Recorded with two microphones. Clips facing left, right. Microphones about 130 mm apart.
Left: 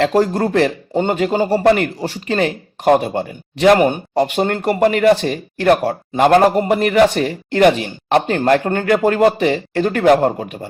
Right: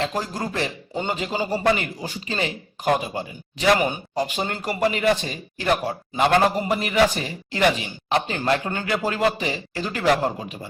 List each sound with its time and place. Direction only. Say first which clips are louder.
0.0 s speech: left 11 dB; 65° left (ahead or behind)
6.2 s speech: left 7 dB; 45° left (ahead or behind)